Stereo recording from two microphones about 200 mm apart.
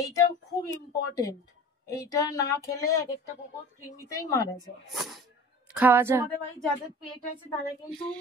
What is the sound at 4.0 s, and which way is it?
Speech, 15° left (ahead or behind).